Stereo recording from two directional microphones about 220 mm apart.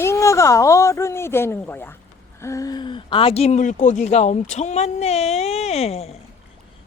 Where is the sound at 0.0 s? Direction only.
15° left (ahead or behind).